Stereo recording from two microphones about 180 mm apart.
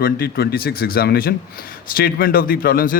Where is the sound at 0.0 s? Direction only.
60° left (ahead or behind).